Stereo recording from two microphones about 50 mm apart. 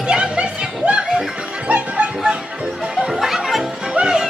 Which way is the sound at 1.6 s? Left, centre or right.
Right.